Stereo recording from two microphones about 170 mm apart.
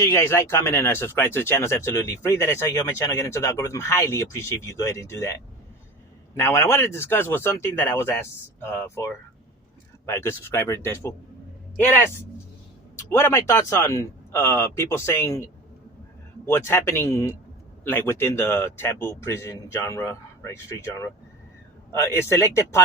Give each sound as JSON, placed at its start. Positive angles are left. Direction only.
{"t": 0.0, "sound": "speech", "side_deg": 15}
{"t": 6.3, "sound": "speech", "side_deg": 15}
{"t": 13.0, "sound": "speech", "side_deg": 15}
{"t": 16.5, "sound": "speech", "side_deg": 15}